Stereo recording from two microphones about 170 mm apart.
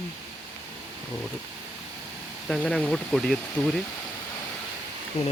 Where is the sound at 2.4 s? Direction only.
Centre (ahead or behind).